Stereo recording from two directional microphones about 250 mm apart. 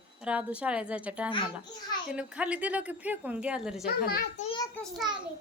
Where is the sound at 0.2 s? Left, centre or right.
Centre.